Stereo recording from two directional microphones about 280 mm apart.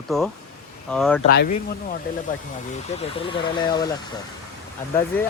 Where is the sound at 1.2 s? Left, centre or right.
Left.